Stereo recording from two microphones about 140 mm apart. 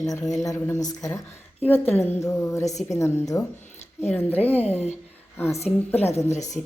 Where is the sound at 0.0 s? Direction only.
25° left (ahead or behind).